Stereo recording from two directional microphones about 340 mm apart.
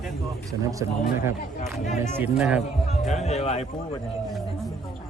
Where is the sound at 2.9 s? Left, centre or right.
Centre.